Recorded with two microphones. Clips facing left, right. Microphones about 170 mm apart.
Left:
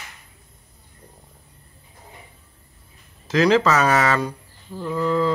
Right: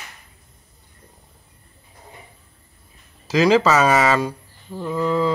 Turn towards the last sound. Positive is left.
turn(degrees=-5)  # may be behind; listen again after turning